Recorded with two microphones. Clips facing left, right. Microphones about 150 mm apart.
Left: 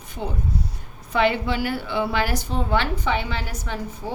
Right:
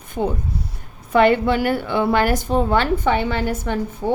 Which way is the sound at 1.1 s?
50° right (ahead or behind).